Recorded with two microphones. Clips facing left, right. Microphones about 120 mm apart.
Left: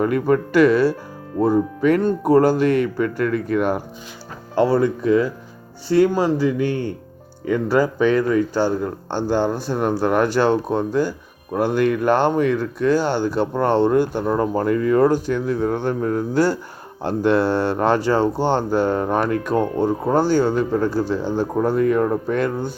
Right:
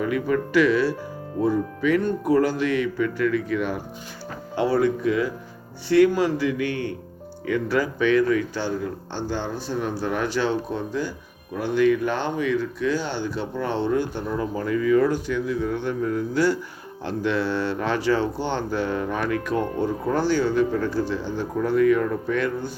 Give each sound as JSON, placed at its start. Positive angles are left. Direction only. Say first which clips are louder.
{"t": 0.0, "sound": "speech", "louder": "left 5 dB", "side_deg": 45}